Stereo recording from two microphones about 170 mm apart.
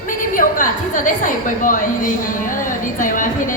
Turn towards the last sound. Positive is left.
turn(degrees=50)  # may be behind; listen again after turning